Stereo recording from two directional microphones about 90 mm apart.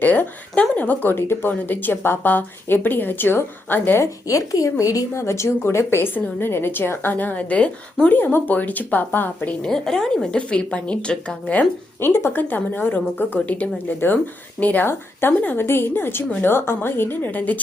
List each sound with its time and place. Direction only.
0.0 s a woman's voice: 20° left (ahead or behind)
4.0 s a woman's voice: 40° left (ahead or behind); by 9.6 s 20° left (ahead or behind)
9.6 s speech: 5° left (ahead or behind)
11.9 s a woman's voice: 25° left (ahead or behind)